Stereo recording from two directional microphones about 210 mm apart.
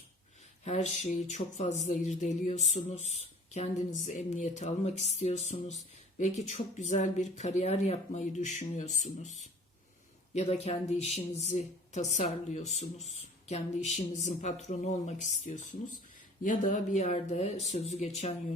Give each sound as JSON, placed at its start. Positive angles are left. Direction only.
{"t": 0.6, "sound": "a woman's voice", "side_deg": 30}
{"t": 10.3, "sound": "a woman's voice", "side_deg": 30}